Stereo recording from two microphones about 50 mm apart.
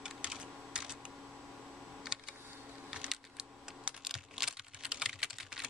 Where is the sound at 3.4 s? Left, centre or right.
Centre.